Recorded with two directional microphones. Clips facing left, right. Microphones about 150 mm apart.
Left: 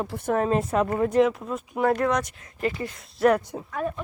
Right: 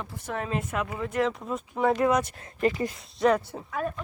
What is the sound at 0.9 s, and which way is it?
Speech, 50° left (ahead or behind).